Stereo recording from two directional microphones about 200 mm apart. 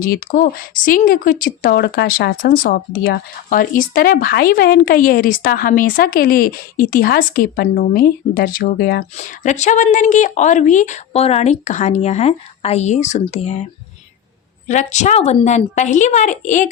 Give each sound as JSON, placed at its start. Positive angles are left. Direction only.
{"t": 0.0, "sound": "speech", "side_deg": 45}
{"t": 9.1, "sound": "a woman's voice", "side_deg": 35}
{"t": 14.7, "sound": "a woman's voice", "side_deg": 35}